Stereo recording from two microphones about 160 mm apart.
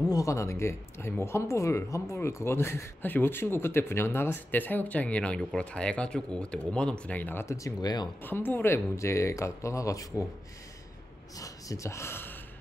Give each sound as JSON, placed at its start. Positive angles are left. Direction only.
{"t": 0.1, "sound": "speech", "side_deg": 20}
{"t": 8.2, "sound": "speech", "side_deg": 10}
{"t": 11.3, "sound": "speech", "side_deg": 20}